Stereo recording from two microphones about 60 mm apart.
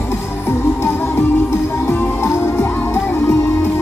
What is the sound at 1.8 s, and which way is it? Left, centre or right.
Music, left.